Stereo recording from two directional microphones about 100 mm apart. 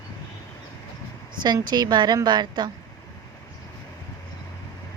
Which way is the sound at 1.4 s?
45° right (ahead or behind).